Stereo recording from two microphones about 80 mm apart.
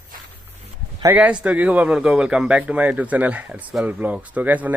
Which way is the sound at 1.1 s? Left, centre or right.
Centre.